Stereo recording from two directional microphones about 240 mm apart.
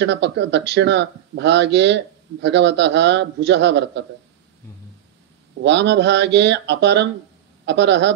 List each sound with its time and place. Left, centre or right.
0.0 s speech: right
5.6 s speech: right